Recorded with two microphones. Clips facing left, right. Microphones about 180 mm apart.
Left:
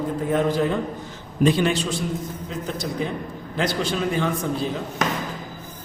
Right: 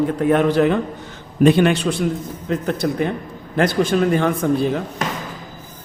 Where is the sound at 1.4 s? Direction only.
60° right (ahead or behind).